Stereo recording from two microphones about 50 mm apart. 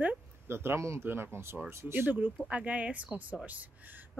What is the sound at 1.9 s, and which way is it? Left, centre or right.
Speech, right.